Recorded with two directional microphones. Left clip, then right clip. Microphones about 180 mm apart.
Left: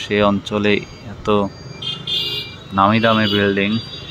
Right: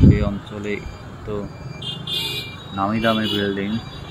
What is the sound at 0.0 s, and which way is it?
Speech, 40° left (ahead or behind).